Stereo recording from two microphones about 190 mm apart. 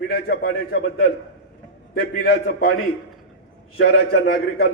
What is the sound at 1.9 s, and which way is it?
Speech, 55° left (ahead or behind).